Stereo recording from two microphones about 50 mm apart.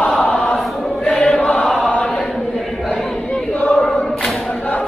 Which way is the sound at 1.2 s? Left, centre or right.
Centre.